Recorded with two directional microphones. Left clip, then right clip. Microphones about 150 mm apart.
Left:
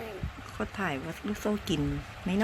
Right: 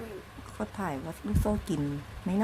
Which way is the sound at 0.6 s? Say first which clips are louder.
Left 2 dB; 5° left (ahead or behind).